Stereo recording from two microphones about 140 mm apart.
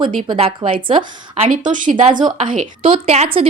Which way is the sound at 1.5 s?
70° right (ahead or behind).